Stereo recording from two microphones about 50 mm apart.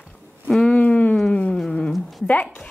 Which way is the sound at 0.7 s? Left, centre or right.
Left.